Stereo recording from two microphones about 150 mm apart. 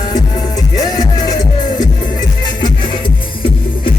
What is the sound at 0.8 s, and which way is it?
Music, 25° left (ahead or behind).